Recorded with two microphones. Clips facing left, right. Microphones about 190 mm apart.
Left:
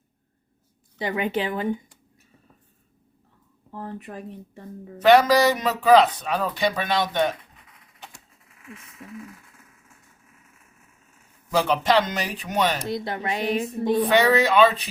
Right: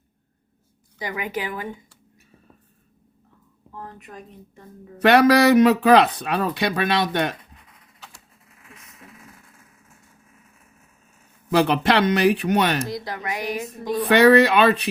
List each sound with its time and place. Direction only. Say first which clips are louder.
0.9 s speech: left 4 dB; 30° left (ahead or behind)
3.8 s speech: left 4 dB; 35° left (ahead or behind)
5.0 s speech: right 2 dB; 70° right (ahead or behind)
11.5 s speech: right 2 dB; 65° right (ahead or behind)
12.9 s speech: left 2 dB; 30° left (ahead or behind)
14.0 s speech: right 7 dB; 65° right (ahead or behind)